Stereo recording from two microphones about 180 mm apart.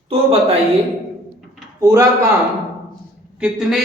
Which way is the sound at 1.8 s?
15° right (ahead or behind).